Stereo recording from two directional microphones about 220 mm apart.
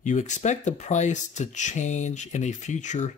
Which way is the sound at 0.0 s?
35° left (ahead or behind).